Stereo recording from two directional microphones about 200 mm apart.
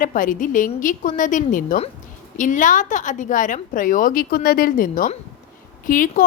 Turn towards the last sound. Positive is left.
turn(degrees=45)  # may be behind; listen again after turning